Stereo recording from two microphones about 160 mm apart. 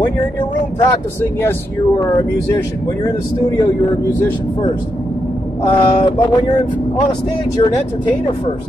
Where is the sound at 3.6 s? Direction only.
30° left (ahead or behind).